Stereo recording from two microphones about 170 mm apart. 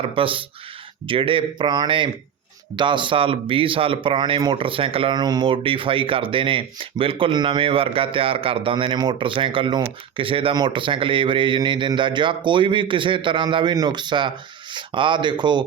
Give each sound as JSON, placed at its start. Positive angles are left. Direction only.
{"t": 0.0, "sound": "speech", "side_deg": -30}